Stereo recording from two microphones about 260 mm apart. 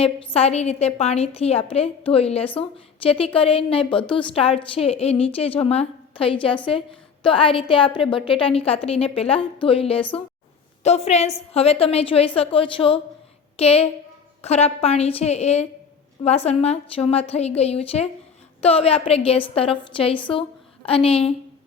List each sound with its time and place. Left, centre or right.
0.0 s a woman's voice: left